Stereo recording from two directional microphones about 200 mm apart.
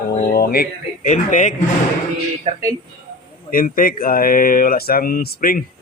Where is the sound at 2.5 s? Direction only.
25° right (ahead or behind).